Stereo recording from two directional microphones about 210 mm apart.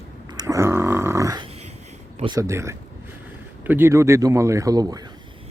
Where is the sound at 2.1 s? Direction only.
20° right (ahead or behind).